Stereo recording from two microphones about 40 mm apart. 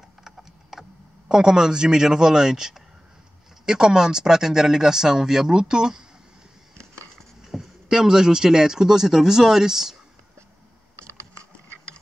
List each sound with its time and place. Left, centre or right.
0.2 s a sound: centre
1.3 s speech: centre
7.4 s speech: centre